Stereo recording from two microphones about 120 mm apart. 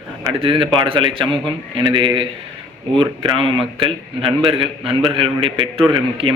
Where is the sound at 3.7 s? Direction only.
50° right (ahead or behind).